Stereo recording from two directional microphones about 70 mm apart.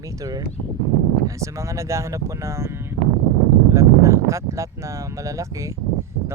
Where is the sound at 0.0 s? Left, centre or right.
Right.